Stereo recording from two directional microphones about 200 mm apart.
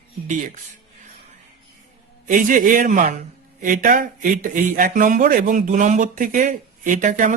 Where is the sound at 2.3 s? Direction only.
40° right (ahead or behind).